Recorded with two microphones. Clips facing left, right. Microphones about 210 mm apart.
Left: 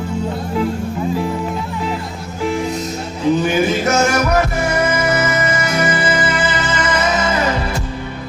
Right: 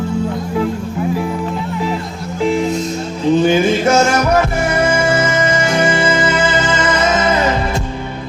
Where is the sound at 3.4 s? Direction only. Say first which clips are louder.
Right 4 dB; 25° right (ahead or behind).